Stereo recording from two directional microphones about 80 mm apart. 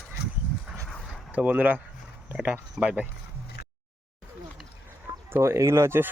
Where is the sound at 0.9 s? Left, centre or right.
Centre.